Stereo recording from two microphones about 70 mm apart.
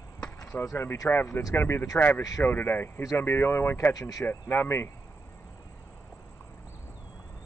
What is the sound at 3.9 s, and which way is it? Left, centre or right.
Speech, left.